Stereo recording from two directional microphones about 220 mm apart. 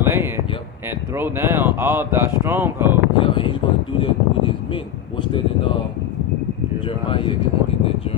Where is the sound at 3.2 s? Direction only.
20° left (ahead or behind).